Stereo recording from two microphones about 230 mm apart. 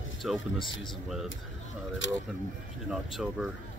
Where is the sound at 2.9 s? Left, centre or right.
Centre.